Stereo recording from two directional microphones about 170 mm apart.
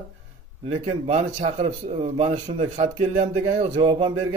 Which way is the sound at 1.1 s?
40° right (ahead or behind).